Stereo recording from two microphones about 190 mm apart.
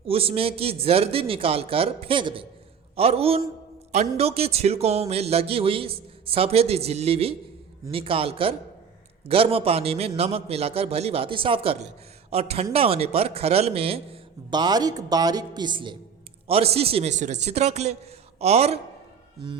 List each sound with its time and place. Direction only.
0.1 s a man's voice: 30° right (ahead or behind)